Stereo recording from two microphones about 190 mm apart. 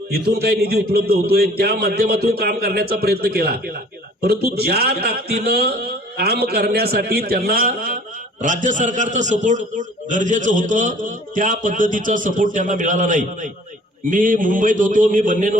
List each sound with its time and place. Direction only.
0.1 s a man's voice: 55° right (ahead or behind)